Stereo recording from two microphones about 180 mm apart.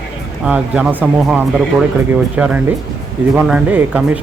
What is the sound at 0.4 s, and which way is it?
Speech, 5° right (ahead or behind).